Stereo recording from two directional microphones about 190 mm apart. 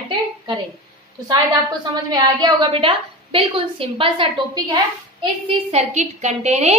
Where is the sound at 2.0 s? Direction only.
25° right (ahead or behind).